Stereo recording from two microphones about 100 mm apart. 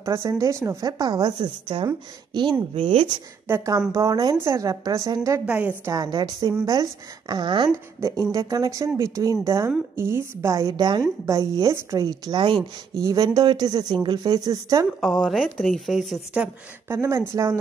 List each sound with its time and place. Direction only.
0.0 s a woman's voice: 30° right (ahead or behind); by 1.9 s 50° right (ahead or behind)
2.7 s speech: 60° right (ahead or behind)
3.4 s a woman's voice: 30° right (ahead or behind)
5.5 s a woman's voice: 15° right (ahead or behind)
5.9 s a woman's voice: 40° right (ahead or behind)
8.3 s a woman's voice: 40° right (ahead or behind)
11.3 s a woman's voice: 30° right (ahead or behind); by 12.5 s 50° right (ahead or behind)
13.0 s a woman's voice: 35° right (ahead or behind)
15.0 s speech: centre (ahead or behind)
16.8 s speech: 25° right (ahead or behind)